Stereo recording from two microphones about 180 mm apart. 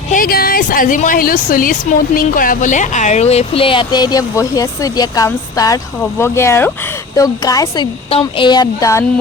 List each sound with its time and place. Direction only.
0.1 s speech: 55° left (ahead or behind); by 9.0 s 15° left (ahead or behind)